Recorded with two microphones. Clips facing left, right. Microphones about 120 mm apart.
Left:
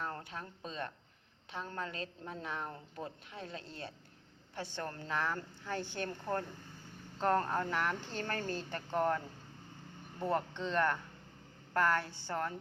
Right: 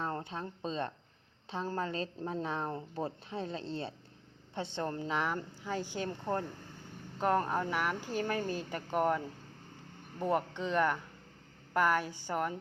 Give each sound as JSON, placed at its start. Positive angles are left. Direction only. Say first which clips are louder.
{"t": 0.0, "sound": "a woman's voice", "louder": "right 5 dB", "side_deg": -25}